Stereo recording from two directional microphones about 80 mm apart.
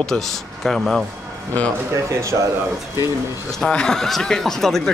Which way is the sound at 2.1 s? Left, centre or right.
Right.